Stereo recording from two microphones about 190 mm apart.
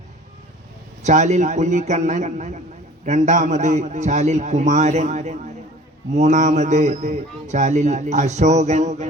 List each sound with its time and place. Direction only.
1.0 s a man's voice: 40° right (ahead or behind)